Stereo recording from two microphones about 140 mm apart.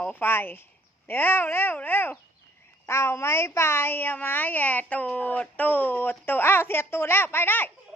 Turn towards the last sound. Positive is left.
turn(degrees=15)  # may be behind; listen again after turning